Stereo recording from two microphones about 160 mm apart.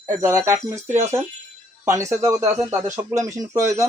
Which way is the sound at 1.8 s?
20° right (ahead or behind).